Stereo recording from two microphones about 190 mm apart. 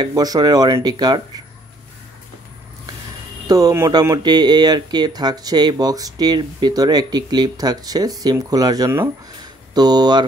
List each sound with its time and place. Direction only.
0.0 s speech: 20° right (ahead or behind)
3.4 s speech: 20° right (ahead or behind)